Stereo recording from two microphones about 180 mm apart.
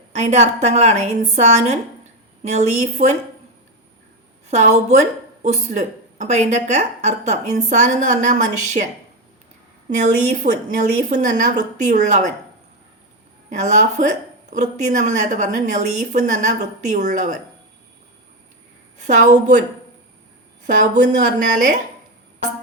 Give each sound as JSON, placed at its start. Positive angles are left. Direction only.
{"t": 0.1, "sound": "a woman's voice", "side_deg": -40}
{"t": 4.5, "sound": "a woman's voice", "side_deg": -40}
{"t": 9.9, "sound": "a woman's voice", "side_deg": -40}
{"t": 13.5, "sound": "a woman's voice", "side_deg": -40}
{"t": 19.0, "sound": "a woman's voice", "side_deg": -45}
{"t": 20.7, "sound": "a woman's voice", "side_deg": -45}